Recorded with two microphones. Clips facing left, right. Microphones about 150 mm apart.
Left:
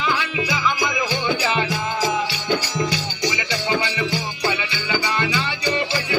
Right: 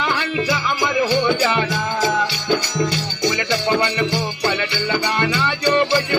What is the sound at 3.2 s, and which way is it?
Music, 65° right (ahead or behind).